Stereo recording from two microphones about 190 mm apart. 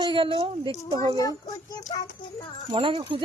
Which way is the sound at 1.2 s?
20° left (ahead or behind).